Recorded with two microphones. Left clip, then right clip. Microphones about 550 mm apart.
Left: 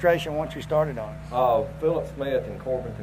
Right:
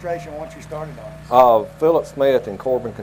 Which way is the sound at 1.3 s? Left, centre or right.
Right.